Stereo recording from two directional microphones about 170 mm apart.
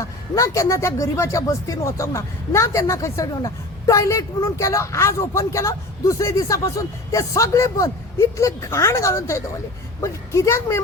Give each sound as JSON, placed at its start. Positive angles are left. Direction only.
{"t": 0.0, "sound": "speech", "side_deg": 20}